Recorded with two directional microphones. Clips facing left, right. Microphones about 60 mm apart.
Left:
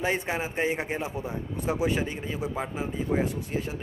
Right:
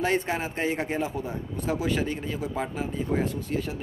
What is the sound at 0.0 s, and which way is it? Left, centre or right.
A man's voice, centre.